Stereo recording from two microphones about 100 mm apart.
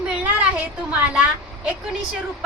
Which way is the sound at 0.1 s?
10° right (ahead or behind).